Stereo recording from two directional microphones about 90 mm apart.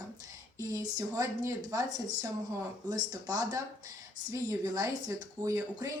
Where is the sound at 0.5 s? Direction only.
35° right (ahead or behind).